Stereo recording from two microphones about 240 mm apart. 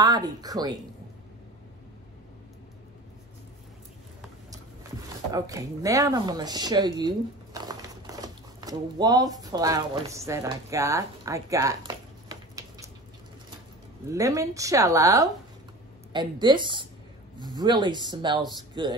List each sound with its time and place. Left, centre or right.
0.0 s speech: centre
5.3 s speech: centre
14.1 s speech: centre